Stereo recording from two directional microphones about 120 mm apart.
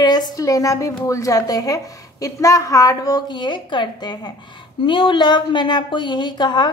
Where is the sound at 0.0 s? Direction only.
35° left (ahead or behind).